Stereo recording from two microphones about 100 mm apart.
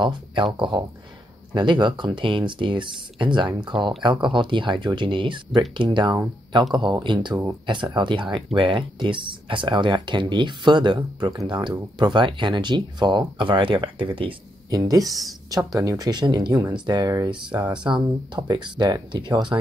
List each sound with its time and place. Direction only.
0.0 s speech: 55° right (ahead or behind)
6.7 s speech: 50° right (ahead or behind)
14.7 s speech: 40° right (ahead or behind)
15.0 s speech: centre (ahead or behind)
15.5 s speech: 35° right (ahead or behind)
17.3 s speech: 50° right (ahead or behind)